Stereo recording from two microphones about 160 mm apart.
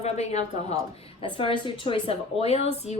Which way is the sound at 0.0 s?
45° left (ahead or behind).